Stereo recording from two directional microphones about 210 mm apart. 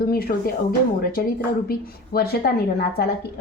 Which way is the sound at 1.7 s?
50° left (ahead or behind).